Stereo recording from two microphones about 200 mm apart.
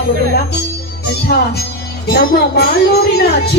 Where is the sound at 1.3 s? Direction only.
55° left (ahead or behind).